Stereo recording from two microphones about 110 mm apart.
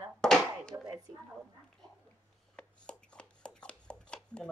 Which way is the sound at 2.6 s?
10° left (ahead or behind).